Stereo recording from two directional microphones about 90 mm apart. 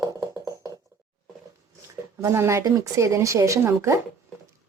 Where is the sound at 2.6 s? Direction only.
40° right (ahead or behind).